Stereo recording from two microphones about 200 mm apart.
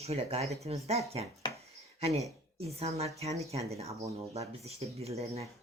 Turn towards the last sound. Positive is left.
turn(degrees=-30)  # may be behind; listen again after turning